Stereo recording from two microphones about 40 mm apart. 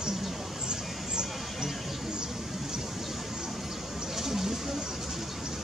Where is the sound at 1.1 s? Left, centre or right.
Centre.